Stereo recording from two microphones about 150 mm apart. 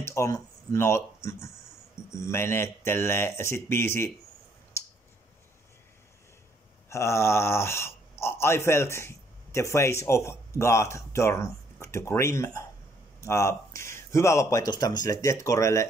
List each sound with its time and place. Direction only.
0.0 s speech: 20° left (ahead or behind)
6.9 s speech: 20° left (ahead or behind)